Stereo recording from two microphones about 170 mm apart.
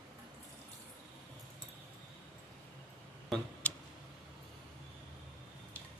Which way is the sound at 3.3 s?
5° left (ahead or behind).